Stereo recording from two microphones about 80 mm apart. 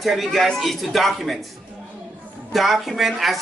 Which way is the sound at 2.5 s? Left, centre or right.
Centre.